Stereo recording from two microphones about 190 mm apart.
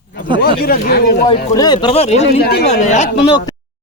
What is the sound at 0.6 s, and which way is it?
Speech, 55° left (ahead or behind).